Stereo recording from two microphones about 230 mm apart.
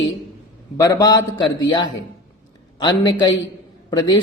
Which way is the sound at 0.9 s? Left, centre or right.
Centre.